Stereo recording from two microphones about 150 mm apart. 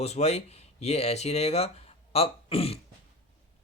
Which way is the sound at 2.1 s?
40° left (ahead or behind).